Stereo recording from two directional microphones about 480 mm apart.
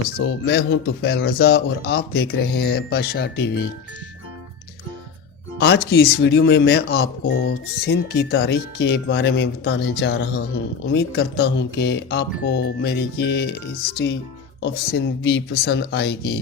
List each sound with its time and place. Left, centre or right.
0.2 s speech: left
5.5 s speech: left
14.6 s speech: left